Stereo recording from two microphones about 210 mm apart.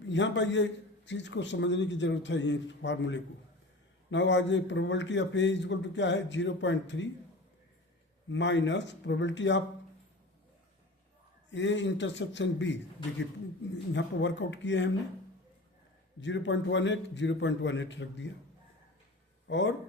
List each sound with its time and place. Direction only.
0.0 s a man's voice: 60° left (ahead or behind)
8.3 s a man's voice: 60° left (ahead or behind)
11.5 s a man's voice: 60° left (ahead or behind)
16.2 s a man's voice: 60° left (ahead or behind)
19.5 s a man's voice: 60° left (ahead or behind)